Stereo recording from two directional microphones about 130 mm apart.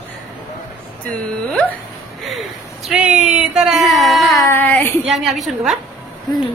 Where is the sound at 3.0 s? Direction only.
60° right (ahead or behind).